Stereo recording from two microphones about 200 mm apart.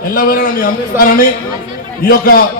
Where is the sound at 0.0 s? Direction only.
45° left (ahead or behind).